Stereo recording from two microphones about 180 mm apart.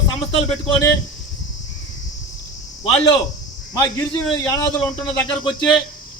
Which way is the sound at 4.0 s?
15° left (ahead or behind).